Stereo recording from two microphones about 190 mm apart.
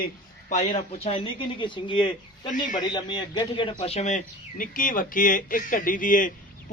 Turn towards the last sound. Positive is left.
turn(degrees=45)  # may be behind; listen again after turning